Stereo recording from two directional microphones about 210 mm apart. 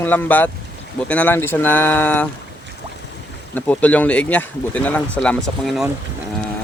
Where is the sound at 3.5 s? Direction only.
10° left (ahead or behind).